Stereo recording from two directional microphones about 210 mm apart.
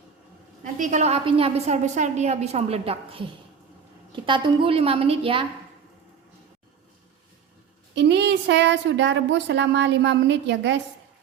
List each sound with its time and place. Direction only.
0.6 s a woman's voice: 35° right (ahead or behind)
7.9 s speech: 55° right (ahead or behind)